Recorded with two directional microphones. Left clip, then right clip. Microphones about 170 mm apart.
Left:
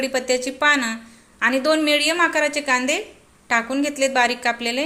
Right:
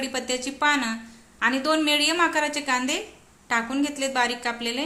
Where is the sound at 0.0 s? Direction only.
15° left (ahead or behind).